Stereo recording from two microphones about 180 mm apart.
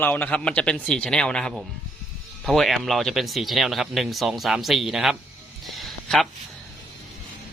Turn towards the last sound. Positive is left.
turn(degrees=0)  # may be behind; listen again after turning